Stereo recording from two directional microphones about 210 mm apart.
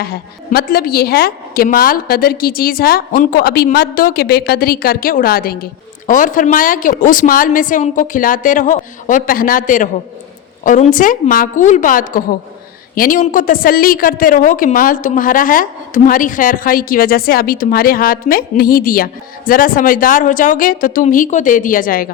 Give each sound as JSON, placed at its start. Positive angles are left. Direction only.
{"t": 0.0, "sound": "a woman's voice", "side_deg": 45}